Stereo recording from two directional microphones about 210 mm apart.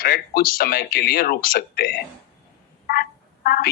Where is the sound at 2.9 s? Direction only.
45° left (ahead or behind).